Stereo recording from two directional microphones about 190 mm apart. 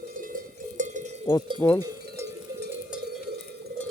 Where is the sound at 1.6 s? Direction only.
15° left (ahead or behind).